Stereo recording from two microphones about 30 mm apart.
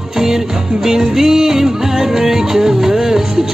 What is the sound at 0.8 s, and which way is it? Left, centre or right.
Music, centre.